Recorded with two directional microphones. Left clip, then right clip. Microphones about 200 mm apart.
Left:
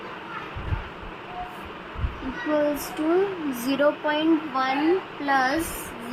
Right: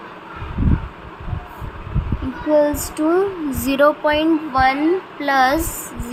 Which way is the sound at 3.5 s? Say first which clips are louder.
Right 9 dB; 35° right (ahead or behind).